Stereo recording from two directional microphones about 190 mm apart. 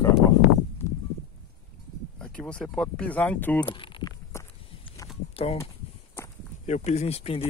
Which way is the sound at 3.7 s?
25° left (ahead or behind).